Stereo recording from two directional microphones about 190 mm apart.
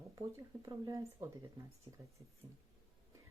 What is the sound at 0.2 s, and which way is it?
Speech, 15° right (ahead or behind).